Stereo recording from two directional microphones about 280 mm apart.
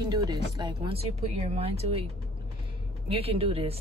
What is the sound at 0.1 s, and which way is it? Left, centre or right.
Speech, centre.